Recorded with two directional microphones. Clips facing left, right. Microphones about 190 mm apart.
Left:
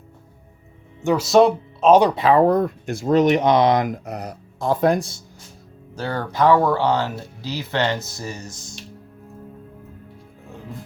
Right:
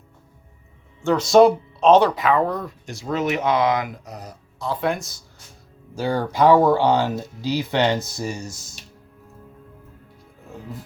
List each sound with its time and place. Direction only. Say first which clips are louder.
1.0 s speech: right 1 dB; 5° left (ahead or behind)
1.9 s speech: left 1 dB; 15° left (ahead or behind)
2.1 s speech: left 5 dB; 35° left (ahead or behind)
4.0 s speech: left 7 dB; 65° left (ahead or behind); by 5.2 s 30° left (ahead or behind)
5.9 s speech: right 3 dB; 10° right (ahead or behind)